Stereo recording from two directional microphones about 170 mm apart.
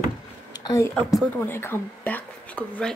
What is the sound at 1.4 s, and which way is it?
A woman's voice, 15° left (ahead or behind).